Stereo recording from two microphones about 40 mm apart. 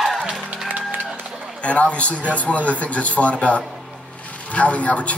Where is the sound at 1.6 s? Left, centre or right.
Left.